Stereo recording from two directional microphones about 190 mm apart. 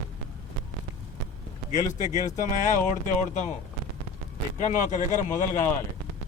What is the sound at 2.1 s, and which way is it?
Speech, 40° left (ahead or behind).